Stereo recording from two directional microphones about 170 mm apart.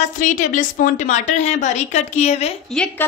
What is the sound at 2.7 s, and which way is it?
Speech, 5° left (ahead or behind).